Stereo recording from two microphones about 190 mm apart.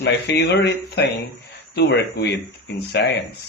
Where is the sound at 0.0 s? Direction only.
65° left (ahead or behind).